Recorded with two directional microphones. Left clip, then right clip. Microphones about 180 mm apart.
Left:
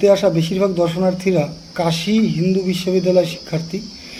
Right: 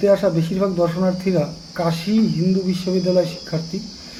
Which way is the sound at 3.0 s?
20° left (ahead or behind).